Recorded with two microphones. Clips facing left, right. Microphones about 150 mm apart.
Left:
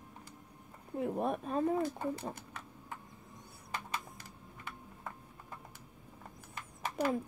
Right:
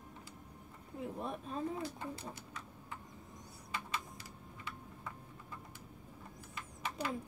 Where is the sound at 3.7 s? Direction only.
50° left (ahead or behind).